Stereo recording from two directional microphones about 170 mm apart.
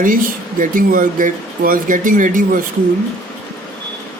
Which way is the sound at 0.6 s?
55° right (ahead or behind).